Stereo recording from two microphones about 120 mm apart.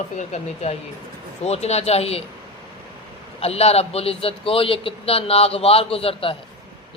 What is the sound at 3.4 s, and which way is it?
A man's voice, 60° left (ahead or behind).